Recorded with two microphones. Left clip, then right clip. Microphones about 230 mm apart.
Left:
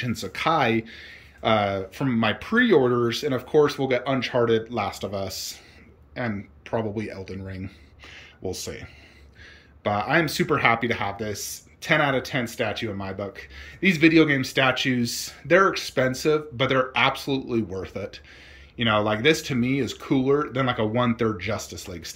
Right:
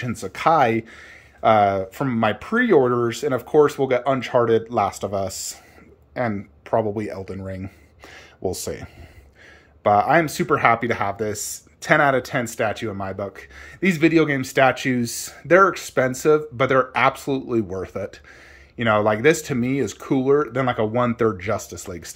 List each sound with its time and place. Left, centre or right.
0.0 s speech: centre